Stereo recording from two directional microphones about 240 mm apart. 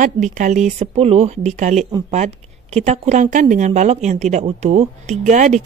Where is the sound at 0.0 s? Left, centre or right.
Right.